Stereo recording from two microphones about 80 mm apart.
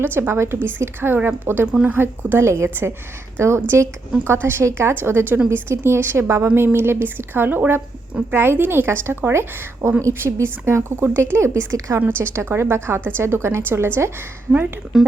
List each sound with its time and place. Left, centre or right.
0.0 s a woman's voice: right
1.6 s speech: centre
1.9 s a woman's voice: right
14.9 s speech: centre